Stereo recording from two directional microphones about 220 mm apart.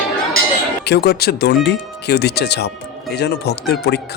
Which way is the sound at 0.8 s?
50° left (ahead or behind).